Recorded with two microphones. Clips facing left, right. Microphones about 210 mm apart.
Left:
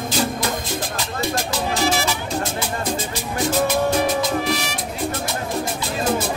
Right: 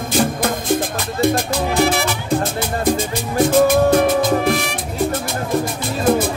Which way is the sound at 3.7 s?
55° right (ahead or behind).